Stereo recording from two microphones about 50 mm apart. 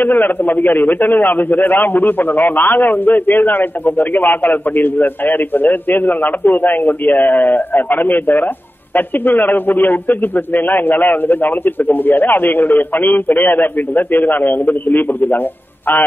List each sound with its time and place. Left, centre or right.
0.0 s a man's voice: left